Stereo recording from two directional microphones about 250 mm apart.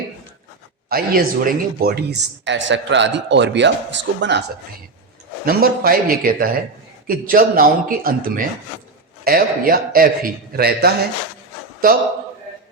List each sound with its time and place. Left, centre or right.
0.9 s speech: right
5.5 s a man's voice: right